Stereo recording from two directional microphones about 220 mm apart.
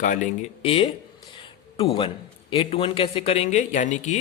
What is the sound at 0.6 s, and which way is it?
A man's voice, 25° left (ahead or behind).